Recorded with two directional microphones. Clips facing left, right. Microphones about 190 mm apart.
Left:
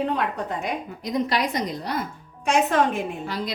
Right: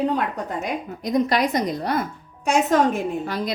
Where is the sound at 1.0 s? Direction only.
50° right (ahead or behind).